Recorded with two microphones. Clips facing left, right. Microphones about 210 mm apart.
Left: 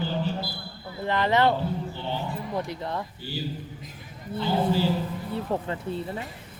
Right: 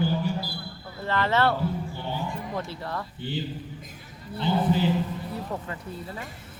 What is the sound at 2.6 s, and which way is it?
Speech, 20° left (ahead or behind).